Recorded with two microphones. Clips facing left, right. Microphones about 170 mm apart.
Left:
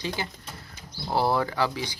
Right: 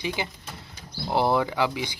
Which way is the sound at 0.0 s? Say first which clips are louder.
Right 2 dB; 15° right (ahead or behind).